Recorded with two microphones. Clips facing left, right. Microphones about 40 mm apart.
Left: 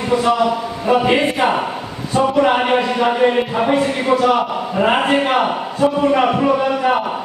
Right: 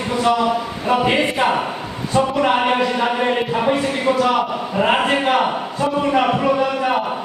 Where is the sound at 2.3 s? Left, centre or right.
Centre.